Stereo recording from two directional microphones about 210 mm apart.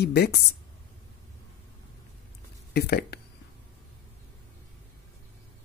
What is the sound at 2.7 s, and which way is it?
Speech, 50° left (ahead or behind).